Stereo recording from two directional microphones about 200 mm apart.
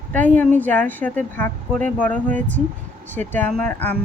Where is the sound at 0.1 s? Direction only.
10° left (ahead or behind).